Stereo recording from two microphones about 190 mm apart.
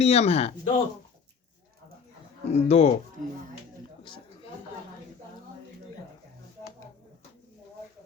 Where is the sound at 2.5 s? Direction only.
35° left (ahead or behind).